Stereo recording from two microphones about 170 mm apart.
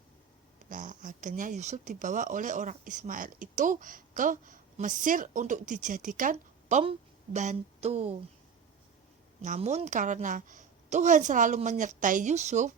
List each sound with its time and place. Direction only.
0.7 s speech: 50° right (ahead or behind)
7.3 s a sound: 40° right (ahead or behind)
9.4 s speech: 45° right (ahead or behind)